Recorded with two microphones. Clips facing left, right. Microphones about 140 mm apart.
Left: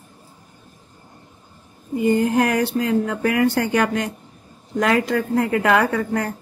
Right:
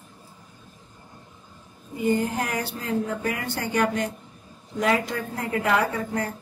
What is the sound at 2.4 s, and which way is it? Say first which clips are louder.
Speech: left 10 dB; 85° left.